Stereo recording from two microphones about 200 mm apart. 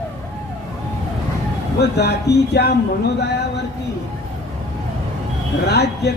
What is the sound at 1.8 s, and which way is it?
Speech, 55° left (ahead or behind).